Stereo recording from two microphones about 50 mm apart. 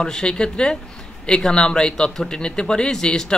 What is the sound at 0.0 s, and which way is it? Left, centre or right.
A man's voice, centre.